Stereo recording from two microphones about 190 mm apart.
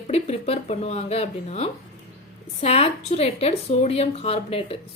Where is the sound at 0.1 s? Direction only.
35° left (ahead or behind).